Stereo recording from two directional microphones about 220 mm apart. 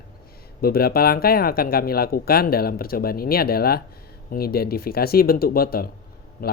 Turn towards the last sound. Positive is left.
turn(degrees=45)  # may be behind; listen again after turning